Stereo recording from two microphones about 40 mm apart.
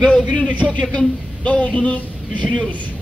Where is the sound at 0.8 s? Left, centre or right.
Left.